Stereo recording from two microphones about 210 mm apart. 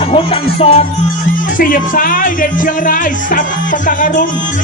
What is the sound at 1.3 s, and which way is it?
Speech, 40° left (ahead or behind).